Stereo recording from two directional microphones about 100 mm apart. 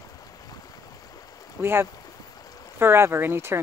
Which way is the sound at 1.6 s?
25° right (ahead or behind).